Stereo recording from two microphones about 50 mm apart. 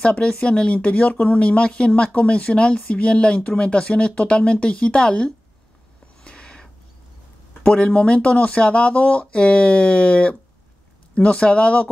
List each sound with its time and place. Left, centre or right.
0.0 s speech: left
6.2 s a sound: centre
7.6 s speech: left